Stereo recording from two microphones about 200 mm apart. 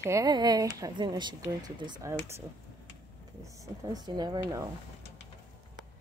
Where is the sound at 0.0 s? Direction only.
15° right (ahead or behind).